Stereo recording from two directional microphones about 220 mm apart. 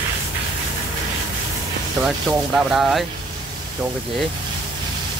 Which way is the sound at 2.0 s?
Centre (ahead or behind).